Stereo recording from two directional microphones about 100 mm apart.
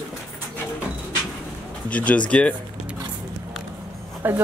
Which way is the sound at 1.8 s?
15° left (ahead or behind).